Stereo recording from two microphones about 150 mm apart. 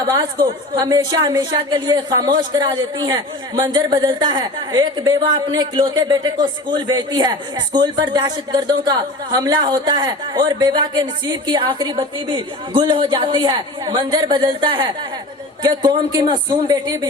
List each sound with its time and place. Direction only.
0.8 s a woman's voice: 25° right (ahead or behind)